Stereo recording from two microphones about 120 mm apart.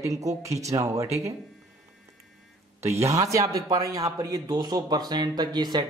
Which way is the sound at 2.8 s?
25° right (ahead or behind).